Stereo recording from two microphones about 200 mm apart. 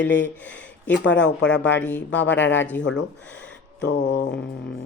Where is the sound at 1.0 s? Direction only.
65° left (ahead or behind).